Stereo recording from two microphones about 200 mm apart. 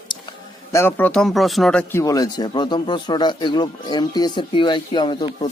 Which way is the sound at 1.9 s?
15° left (ahead or behind).